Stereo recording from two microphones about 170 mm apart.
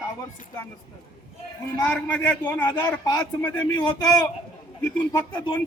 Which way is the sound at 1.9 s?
10° left (ahead or behind).